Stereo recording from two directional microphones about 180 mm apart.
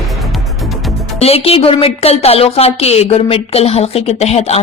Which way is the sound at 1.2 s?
35° left (ahead or behind).